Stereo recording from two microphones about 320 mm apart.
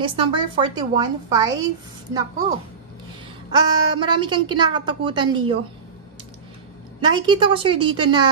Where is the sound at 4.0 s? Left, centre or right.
Centre.